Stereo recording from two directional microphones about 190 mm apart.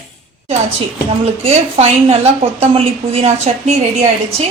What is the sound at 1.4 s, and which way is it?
A woman's voice, 35° right (ahead or behind).